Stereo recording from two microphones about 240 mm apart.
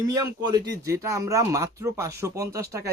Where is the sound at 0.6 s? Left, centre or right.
Right.